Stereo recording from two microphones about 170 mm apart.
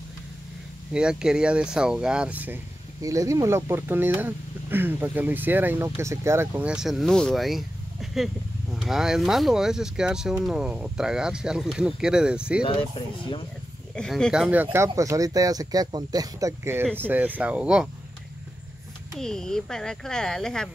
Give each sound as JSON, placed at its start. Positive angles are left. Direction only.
{"t": 0.9, "sound": "speech", "side_deg": -5}
{"t": 13.9, "sound": "speech", "side_deg": 5}
{"t": 19.1, "sound": "speech", "side_deg": 5}